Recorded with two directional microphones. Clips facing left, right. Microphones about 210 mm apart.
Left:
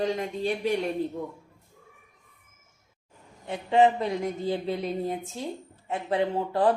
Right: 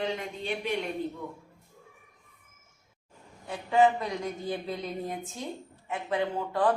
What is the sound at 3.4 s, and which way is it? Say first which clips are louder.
Speech: left 2 dB; 25° left (ahead or behind).